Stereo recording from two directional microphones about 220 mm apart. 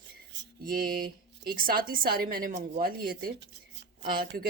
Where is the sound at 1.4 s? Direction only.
40° right (ahead or behind).